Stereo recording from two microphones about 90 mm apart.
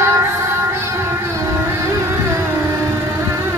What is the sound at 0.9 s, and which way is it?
Carnatic music, 30° right (ahead or behind).